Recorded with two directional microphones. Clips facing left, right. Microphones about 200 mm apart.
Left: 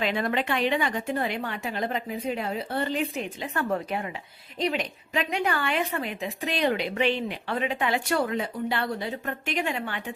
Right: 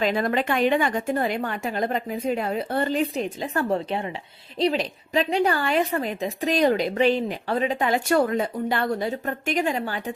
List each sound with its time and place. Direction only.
0.0 s a woman's voice: 40° right (ahead or behind)